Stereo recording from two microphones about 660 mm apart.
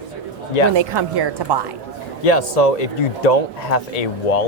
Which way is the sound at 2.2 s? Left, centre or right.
Left.